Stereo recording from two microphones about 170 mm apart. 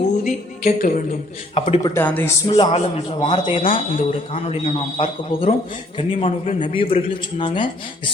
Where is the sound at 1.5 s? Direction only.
35° left (ahead or behind).